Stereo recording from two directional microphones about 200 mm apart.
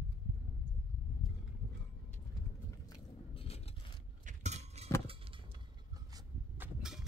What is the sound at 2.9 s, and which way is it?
Biting, 30° left (ahead or behind).